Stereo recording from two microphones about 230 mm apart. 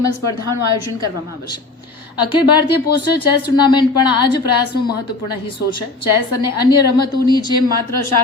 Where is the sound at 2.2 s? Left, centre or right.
Centre.